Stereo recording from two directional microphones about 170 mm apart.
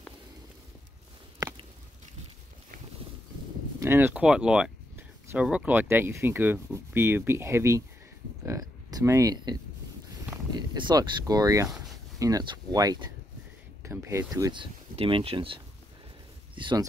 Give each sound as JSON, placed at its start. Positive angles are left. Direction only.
{"t": 3.8, "sound": "speech", "side_deg": -15}